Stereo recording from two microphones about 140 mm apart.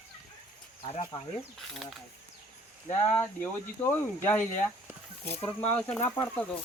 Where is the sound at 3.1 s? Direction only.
15° left (ahead or behind).